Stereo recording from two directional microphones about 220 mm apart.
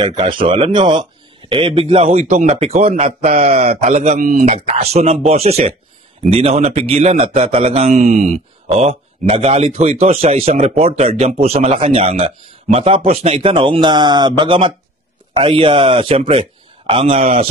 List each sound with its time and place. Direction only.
0.0 s a man's voice: 20° right (ahead or behind)